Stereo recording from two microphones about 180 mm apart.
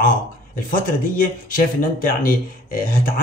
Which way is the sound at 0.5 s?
50° left (ahead or behind).